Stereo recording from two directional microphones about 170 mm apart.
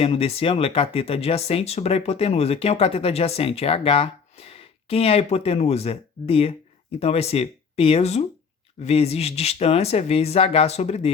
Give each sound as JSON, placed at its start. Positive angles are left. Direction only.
{"t": 0.0, "sound": "speech", "side_deg": 35}